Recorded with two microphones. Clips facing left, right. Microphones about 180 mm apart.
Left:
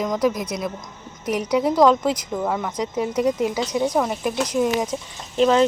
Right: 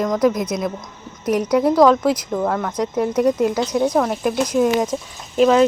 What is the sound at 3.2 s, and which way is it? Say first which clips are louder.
Speech: right 4 dB; 50° right (ahead or behind).